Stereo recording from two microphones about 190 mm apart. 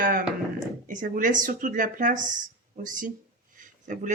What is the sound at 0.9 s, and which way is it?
Speech, 45° right (ahead or behind).